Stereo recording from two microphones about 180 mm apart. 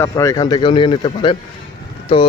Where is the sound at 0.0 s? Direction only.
15° left (ahead or behind).